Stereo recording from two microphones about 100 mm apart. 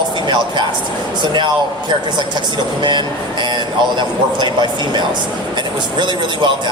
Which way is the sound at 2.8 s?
50° right (ahead or behind).